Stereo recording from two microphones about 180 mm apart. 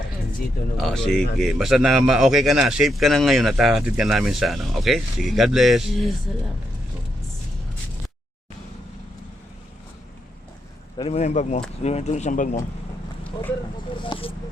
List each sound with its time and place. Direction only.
0.8 s a man's voice: centre (ahead or behind)
10.9 s speech: 35° left (ahead or behind)
14.0 s speech: 30° left (ahead or behind)